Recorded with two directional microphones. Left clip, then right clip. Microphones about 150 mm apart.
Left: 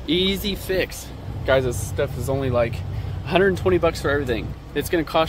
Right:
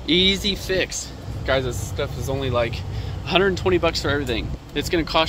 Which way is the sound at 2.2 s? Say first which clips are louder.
Even; 20° left (ahead or behind).